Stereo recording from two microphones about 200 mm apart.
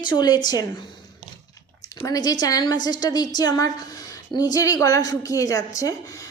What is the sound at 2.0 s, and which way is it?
A woman's voice, 20° left (ahead or behind).